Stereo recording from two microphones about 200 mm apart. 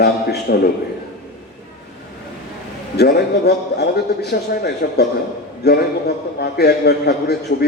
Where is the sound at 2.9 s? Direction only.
55° left (ahead or behind).